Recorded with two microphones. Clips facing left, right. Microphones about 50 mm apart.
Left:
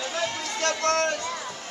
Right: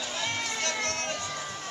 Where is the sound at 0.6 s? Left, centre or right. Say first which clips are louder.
Left 8 dB; left.